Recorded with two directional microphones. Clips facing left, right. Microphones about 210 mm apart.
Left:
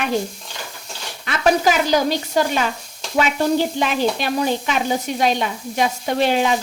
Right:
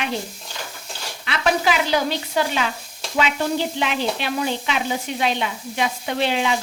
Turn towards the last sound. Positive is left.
turn(degrees=45)  # may be behind; listen again after turning